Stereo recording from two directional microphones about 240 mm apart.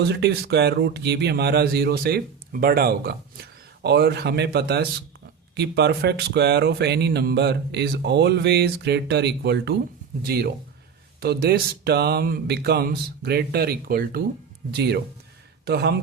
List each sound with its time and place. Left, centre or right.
0.0 s speech: right